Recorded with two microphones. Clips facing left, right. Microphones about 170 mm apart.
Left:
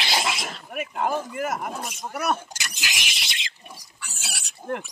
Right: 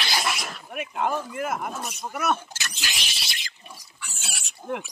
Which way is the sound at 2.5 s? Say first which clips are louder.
Left 1 dB; 15° left (ahead or behind).